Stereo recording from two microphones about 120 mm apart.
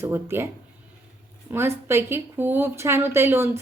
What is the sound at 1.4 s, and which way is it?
A woman's voice, 20° right (ahead or behind).